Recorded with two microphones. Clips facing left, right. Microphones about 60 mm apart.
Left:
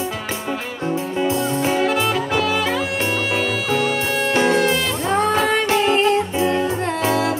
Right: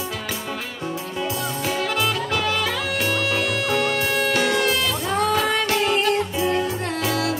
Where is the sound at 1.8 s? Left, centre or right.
Centre.